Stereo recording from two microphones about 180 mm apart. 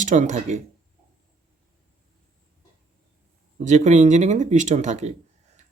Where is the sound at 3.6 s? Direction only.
40° right (ahead or behind).